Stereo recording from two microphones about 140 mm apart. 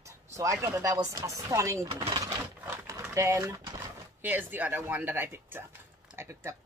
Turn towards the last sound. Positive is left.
turn(degrees=-20)  # may be behind; listen again after turning